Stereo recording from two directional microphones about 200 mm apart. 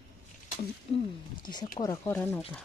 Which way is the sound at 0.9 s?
20° left (ahead or behind).